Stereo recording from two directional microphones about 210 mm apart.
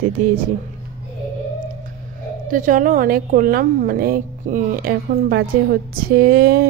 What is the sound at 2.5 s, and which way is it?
A woman's voice, 40° right (ahead or behind).